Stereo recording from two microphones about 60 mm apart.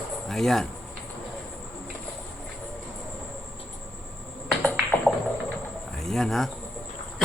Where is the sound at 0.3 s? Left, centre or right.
Centre.